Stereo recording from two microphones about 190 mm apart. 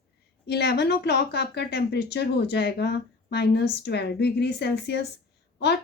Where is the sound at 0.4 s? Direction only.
60° left (ahead or behind).